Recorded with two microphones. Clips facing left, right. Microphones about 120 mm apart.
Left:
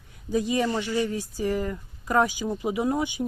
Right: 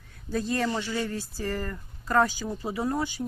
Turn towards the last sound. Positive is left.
turn(degrees=15)  # may be behind; listen again after turning